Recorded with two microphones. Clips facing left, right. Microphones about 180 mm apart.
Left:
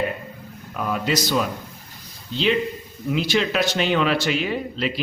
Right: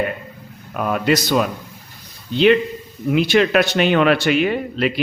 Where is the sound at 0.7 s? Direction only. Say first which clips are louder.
Right 5 dB; 60° right (ahead or behind).